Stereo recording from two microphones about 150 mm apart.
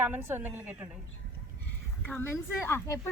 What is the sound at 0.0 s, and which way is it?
Speech, 15° right (ahead or behind).